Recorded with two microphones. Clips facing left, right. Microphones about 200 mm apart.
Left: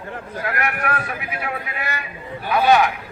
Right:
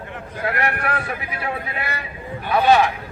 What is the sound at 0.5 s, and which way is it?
Speech, 30° right (ahead or behind).